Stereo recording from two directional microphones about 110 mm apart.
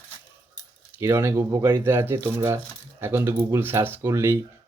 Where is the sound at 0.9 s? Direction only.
20° right (ahead or behind).